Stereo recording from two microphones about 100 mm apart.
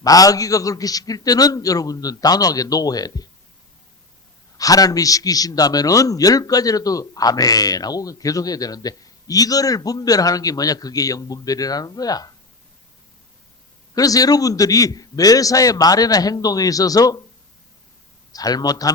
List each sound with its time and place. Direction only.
0.0 s a man's voice: 35° left (ahead or behind)
4.5 s a man's voice: 35° left (ahead or behind)
13.9 s a man's voice: 35° left (ahead or behind)
18.3 s a man's voice: 40° left (ahead or behind)